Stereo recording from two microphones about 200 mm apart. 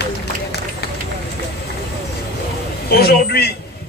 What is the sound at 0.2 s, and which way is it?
Run, 55° left (ahead or behind).